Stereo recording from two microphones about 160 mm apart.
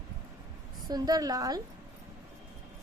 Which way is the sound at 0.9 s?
25° right (ahead or behind).